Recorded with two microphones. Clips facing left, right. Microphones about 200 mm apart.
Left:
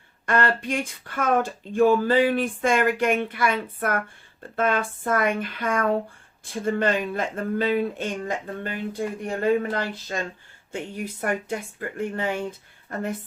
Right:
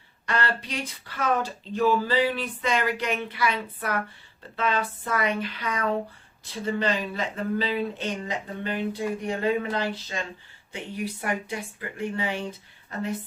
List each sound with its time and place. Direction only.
0.3 s speech: 50° left (ahead or behind)